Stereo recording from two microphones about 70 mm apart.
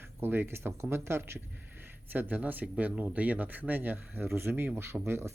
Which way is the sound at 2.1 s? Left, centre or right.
Right.